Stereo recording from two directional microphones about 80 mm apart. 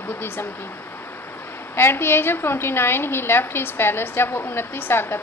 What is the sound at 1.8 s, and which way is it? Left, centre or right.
A woman's voice, left.